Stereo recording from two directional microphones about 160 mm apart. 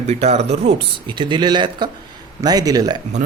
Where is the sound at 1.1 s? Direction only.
30° right (ahead or behind).